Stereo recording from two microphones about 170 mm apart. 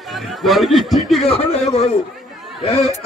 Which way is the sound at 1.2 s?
35° left (ahead or behind).